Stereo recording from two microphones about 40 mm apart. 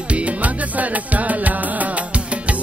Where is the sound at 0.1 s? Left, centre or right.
Right.